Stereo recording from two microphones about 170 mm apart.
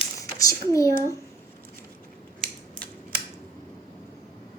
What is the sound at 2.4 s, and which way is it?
Scissors, 55° right (ahead or behind).